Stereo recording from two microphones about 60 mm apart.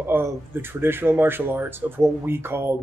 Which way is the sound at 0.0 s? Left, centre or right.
Right.